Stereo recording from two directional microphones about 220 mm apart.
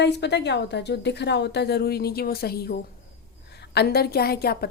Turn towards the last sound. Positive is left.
turn(degrees=45)  # may be behind; listen again after turning